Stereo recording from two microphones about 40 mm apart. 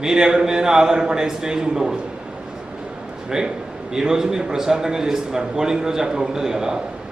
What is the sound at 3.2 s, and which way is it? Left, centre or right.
A man's voice, centre.